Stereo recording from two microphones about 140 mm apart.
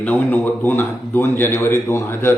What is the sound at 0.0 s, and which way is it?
A man's voice, 10° left (ahead or behind).